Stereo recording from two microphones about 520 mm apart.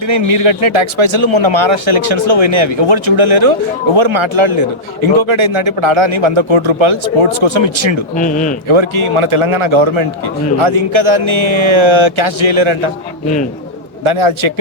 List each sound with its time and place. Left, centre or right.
0.1 s a man's voice: right
8.1 s speech: centre
8.7 s a man's voice: right
14.0 s a man's voice: right